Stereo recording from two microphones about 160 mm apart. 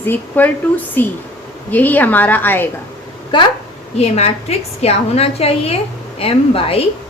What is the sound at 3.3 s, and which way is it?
Speech, 30° left (ahead or behind).